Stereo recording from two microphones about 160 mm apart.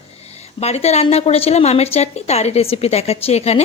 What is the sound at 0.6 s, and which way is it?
A woman's voice, 40° left (ahead or behind).